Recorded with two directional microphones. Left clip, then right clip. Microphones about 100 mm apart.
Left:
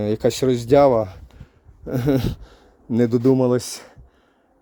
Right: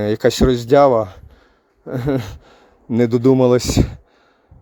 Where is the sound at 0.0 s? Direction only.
25° right (ahead or behind); by 1.2 s 5° right (ahead or behind).